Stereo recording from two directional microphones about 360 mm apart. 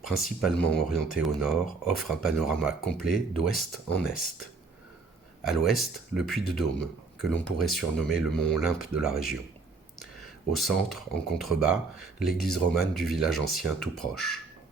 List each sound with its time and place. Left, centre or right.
0.0 s speech: centre
5.5 s speech: centre
10.5 s speech: centre